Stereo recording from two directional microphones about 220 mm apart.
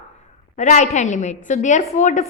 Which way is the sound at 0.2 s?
30° left (ahead or behind).